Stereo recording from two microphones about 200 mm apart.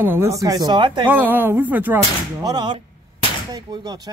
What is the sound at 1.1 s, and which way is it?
Speech, 10° right (ahead or behind).